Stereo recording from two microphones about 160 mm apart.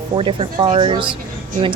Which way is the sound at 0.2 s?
35° right (ahead or behind).